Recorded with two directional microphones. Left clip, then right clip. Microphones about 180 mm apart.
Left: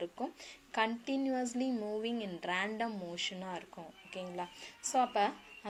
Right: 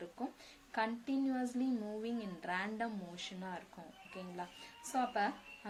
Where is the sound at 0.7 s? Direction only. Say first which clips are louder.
Left 4 dB; 30° left (ahead or behind).